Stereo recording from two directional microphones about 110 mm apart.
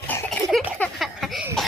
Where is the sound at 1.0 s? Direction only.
Centre (ahead or behind).